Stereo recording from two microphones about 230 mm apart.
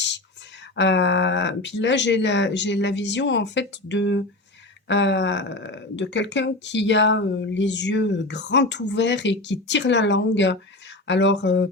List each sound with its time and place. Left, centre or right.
0.8 s speech: left